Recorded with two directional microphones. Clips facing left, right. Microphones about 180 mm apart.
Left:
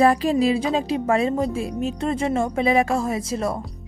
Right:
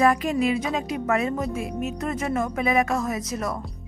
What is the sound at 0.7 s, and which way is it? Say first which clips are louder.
A woman's voice: left 4 dB; 30° left (ahead or behind).